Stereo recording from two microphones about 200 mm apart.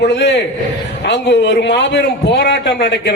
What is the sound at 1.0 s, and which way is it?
A man's voice, 60° left (ahead or behind).